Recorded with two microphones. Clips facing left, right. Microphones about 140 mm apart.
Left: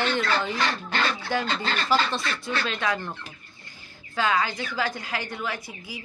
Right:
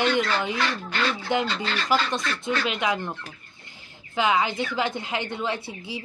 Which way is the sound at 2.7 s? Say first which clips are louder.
Right 2 dB; 15° right (ahead or behind).